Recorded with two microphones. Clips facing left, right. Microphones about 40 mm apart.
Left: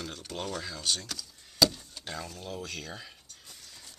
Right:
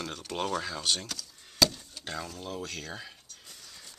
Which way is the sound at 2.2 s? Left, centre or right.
Centre.